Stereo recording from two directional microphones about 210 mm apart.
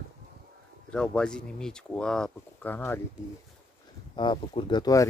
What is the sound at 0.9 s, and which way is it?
Speech, 5° left (ahead or behind).